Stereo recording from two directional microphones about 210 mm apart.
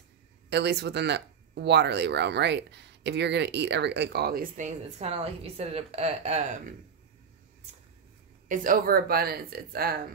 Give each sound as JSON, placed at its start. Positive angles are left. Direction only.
{"t": 0.5, "sound": "speech", "side_deg": -55}
{"t": 8.5, "sound": "speech", "side_deg": -40}